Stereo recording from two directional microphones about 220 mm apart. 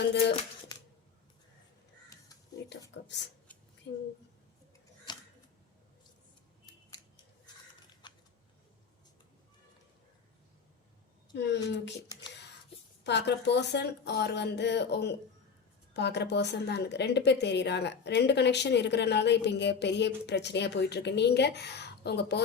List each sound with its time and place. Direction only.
0.1 s a woman's voice: 50° left (ahead or behind)
2.6 s a sound: 55° left (ahead or behind)
2.9 s a woman's voice: 50° left (ahead or behind)
5.1 s a sound: 20° left (ahead or behind)
8.0 s scissors: 20° left (ahead or behind)
11.3 s a woman's voice: 50° left (ahead or behind)
12.3 s whispering: 50° left (ahead or behind)
13.1 s a woman's voice: 50° left (ahead or behind)